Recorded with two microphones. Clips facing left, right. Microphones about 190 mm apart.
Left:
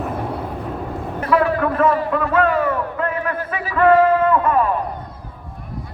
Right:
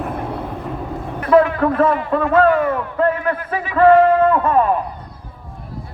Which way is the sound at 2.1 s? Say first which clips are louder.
Right 4 dB; 35° right (ahead or behind).